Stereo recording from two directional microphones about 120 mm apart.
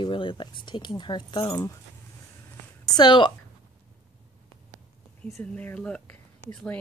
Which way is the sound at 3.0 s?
40° left (ahead or behind).